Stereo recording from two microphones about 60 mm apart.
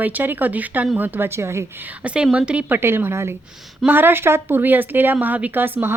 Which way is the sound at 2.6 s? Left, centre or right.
Right.